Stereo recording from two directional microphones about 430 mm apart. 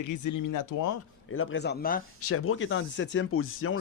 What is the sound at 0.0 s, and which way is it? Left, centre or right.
Speech, left.